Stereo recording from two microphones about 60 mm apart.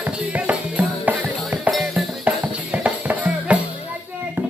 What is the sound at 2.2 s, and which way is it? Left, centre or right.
Music, right.